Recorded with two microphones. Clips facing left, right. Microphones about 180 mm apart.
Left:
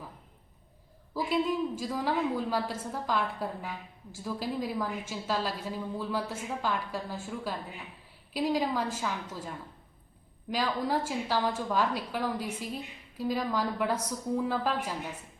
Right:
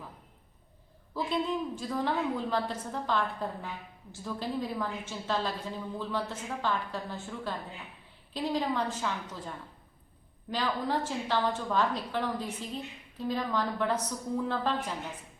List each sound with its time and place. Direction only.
1.1 s a woman's voice: 10° left (ahead or behind)
10.5 s a woman's voice: 10° left (ahead or behind)